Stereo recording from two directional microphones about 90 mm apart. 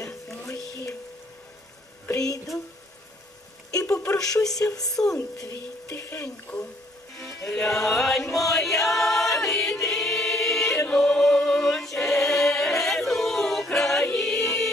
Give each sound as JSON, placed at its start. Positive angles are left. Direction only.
{"t": 2.2, "sound": "speech", "side_deg": 40}
{"t": 3.9, "sound": "a sound", "side_deg": 30}
{"t": 4.2, "sound": "speech", "side_deg": 40}
{"t": 5.9, "sound": "speech", "side_deg": 25}
{"t": 7.2, "sound": "music", "side_deg": 5}
{"t": 9.4, "sound": "choir", "side_deg": 5}